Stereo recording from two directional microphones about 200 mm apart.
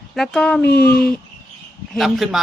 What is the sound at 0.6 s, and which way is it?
Speech, 55° left (ahead or behind).